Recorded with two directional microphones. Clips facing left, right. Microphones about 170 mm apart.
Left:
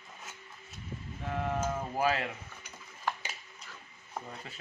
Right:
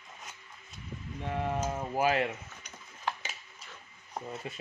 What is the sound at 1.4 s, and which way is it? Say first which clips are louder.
Speech: even; 15° right (ahead or behind).